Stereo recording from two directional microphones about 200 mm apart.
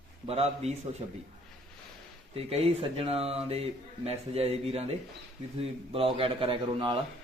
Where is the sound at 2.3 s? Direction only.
30° right (ahead or behind).